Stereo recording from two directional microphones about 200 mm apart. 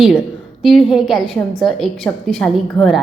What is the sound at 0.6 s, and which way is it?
A woman's voice, centre (ahead or behind).